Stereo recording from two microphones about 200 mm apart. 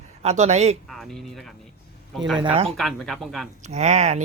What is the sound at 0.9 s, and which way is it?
Speech, centre (ahead or behind).